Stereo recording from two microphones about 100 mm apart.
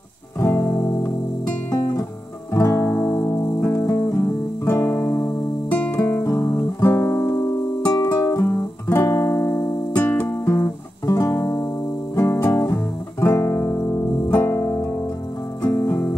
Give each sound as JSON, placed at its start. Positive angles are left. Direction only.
{"t": 0.4, "sound": "music", "side_deg": 30}
{"t": 2.5, "sound": "music", "side_deg": 25}
{"t": 6.2, "sound": "music", "side_deg": 35}
{"t": 7.8, "sound": "music", "side_deg": 40}
{"t": 8.4, "sound": "music", "side_deg": 30}